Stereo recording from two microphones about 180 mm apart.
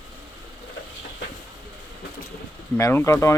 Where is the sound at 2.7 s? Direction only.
15° left (ahead or behind).